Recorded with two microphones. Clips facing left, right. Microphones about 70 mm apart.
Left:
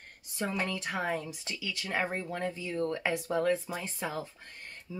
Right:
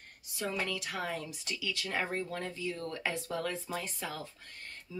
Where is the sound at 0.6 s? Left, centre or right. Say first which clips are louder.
Left 4 dB; left.